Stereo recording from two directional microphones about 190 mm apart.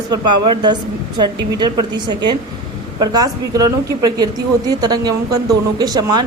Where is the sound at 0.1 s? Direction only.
25° right (ahead or behind).